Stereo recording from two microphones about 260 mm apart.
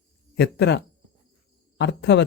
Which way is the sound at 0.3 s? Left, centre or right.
Left.